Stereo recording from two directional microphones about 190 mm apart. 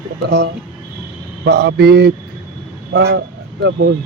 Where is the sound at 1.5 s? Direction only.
60° right (ahead or behind).